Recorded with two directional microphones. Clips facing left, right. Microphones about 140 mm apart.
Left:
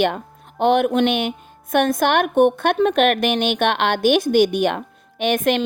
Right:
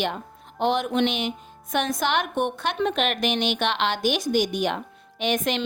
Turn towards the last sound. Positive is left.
turn(degrees=55)  # may be behind; listen again after turning